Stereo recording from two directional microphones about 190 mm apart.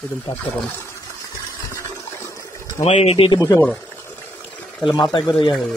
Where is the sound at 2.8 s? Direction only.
30° left (ahead or behind).